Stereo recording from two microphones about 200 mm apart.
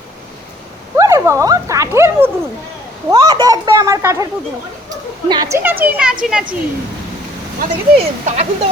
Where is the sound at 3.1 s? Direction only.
20° right (ahead or behind).